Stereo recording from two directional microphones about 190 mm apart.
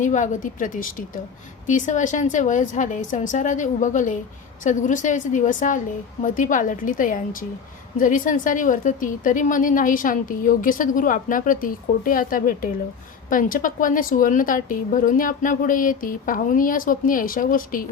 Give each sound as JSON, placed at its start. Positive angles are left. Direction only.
{"t": 0.0, "sound": "a woman's voice", "side_deg": 40}